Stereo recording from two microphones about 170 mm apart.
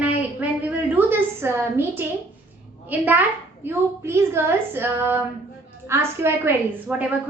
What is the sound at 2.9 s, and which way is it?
Speech, 10° right (ahead or behind).